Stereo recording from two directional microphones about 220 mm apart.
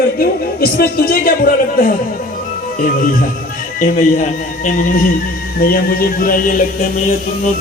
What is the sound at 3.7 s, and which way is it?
Speech, 35° left (ahead or behind).